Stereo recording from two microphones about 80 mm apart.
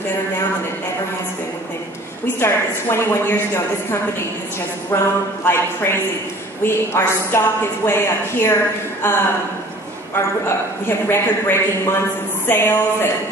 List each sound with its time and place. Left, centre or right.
2.3 s a woman's voice: left